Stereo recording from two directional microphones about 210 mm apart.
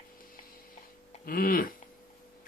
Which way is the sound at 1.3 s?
40° left (ahead or behind).